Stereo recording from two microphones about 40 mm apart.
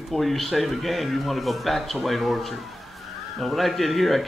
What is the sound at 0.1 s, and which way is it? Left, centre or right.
Speech, centre.